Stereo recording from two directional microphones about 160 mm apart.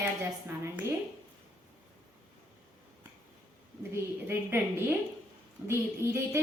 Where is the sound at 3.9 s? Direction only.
15° right (ahead or behind).